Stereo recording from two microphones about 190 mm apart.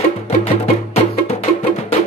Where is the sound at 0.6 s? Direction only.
35° left (ahead or behind).